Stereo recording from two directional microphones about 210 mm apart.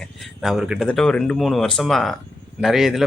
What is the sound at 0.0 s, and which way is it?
Speech, centre (ahead or behind).